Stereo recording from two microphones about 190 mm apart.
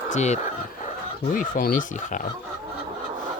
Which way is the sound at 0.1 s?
35° left (ahead or behind).